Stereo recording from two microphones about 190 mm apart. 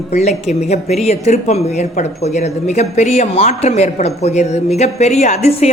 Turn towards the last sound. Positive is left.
turn(degrees=35)  # may be behind; listen again after turning